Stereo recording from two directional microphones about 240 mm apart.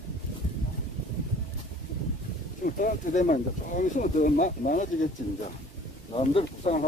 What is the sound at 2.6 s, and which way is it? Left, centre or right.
Speech, left.